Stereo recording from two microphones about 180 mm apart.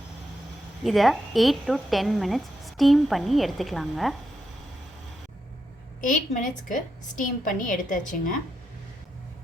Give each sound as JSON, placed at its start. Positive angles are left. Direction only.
{"t": 0.9, "sound": "a woman's voice", "side_deg": 0}
{"t": 6.0, "sound": "a woman's voice", "side_deg": 45}